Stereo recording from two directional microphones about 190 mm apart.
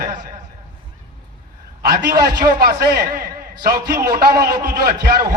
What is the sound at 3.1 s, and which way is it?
A man's voice, 50° right (ahead or behind).